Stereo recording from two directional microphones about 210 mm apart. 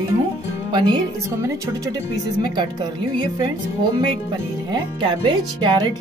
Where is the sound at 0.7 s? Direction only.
20° right (ahead or behind).